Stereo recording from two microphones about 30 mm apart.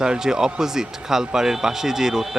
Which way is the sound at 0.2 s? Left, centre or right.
Centre.